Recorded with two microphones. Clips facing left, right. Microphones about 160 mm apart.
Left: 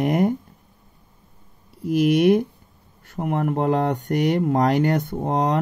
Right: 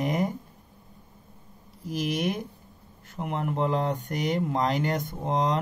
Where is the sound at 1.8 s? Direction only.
60° left (ahead or behind).